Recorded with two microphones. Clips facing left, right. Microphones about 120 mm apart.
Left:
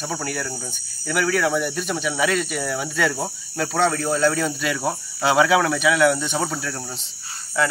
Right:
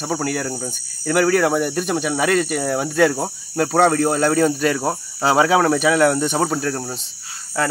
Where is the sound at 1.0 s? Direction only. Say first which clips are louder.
Right 5 dB; 50° right (ahead or behind).